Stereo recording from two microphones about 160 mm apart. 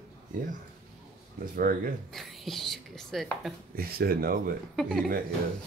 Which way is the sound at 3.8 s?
70° right (ahead or behind).